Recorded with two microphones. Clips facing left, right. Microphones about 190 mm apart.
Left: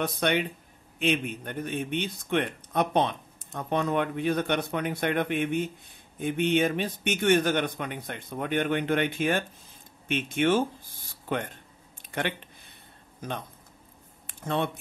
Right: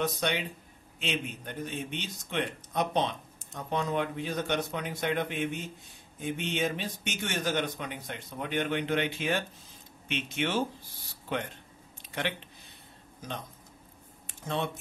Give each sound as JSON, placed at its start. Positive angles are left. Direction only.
{"t": 0.0, "sound": "a man's voice", "side_deg": 60}
{"t": 14.2, "sound": "speech", "side_deg": 60}